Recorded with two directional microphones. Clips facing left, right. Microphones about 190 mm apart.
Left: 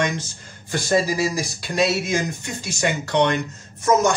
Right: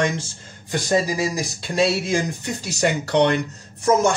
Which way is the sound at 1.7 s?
30° right (ahead or behind).